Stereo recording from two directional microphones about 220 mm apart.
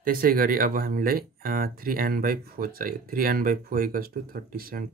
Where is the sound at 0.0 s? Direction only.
40° right (ahead or behind).